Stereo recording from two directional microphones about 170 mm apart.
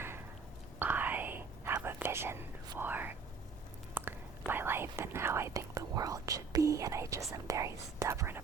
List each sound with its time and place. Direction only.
0.8 s whispering: 10° right (ahead or behind)
7.3 s speech: 20° right (ahead or behind)